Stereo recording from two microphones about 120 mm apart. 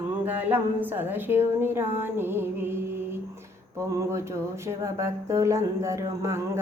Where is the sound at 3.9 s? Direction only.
25° right (ahead or behind).